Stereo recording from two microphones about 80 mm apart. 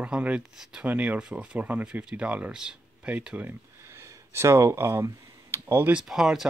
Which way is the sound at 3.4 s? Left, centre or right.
Right.